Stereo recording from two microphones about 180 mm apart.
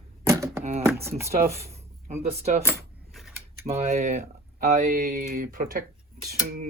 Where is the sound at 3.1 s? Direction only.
5° right (ahead or behind).